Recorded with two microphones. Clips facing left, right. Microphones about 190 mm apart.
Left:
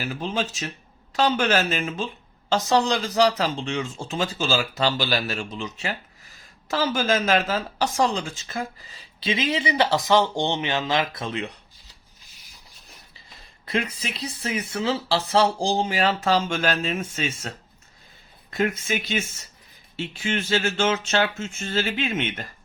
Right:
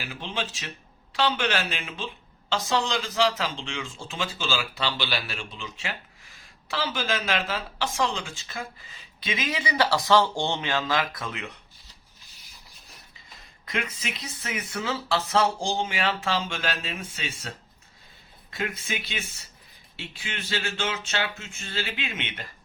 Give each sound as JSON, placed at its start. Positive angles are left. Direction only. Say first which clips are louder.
{"t": 0.0, "sound": "speech", "louder": "left 6 dB", "side_deg": 40}
{"t": 13.7, "sound": "speech", "louder": "left 5 dB", "side_deg": 35}
{"t": 18.5, "sound": "speech", "louder": "left 7 dB", "side_deg": 45}
{"t": 20.2, "sound": "speech", "louder": "left 8 dB", "side_deg": 45}